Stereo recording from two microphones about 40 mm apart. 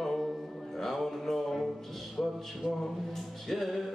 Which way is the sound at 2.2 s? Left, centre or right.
Centre.